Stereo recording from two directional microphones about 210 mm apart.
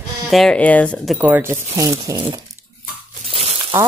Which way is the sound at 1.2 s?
10° right (ahead or behind).